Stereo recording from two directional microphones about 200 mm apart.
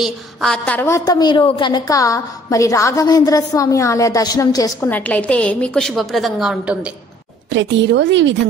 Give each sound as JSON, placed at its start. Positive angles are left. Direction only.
{"t": 0.0, "sound": "a woman's voice", "side_deg": 0}
{"t": 4.9, "sound": "a woman's voice", "side_deg": 5}
{"t": 7.5, "sound": "a woman's voice", "side_deg": -65}